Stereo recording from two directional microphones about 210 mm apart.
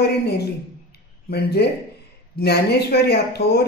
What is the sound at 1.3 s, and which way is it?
Speech, 50° left (ahead or behind).